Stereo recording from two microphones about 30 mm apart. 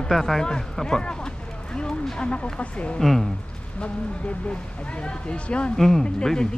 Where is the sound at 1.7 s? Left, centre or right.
Left.